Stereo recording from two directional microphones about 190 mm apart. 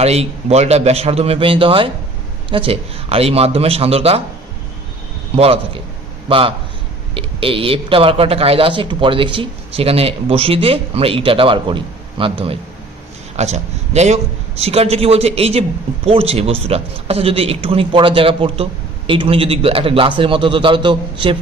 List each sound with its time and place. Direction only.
0.0 s a man's voice: 35° right (ahead or behind)
5.3 s a man's voice: 30° right (ahead or behind)